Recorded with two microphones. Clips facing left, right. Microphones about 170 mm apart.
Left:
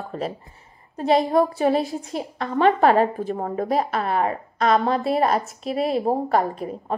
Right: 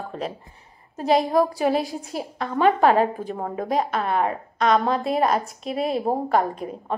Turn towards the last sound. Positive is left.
turn(degrees=0)  # may be behind; listen again after turning